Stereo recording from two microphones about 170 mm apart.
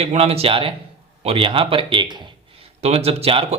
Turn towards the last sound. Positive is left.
turn(degrees=-35)  # may be behind; listen again after turning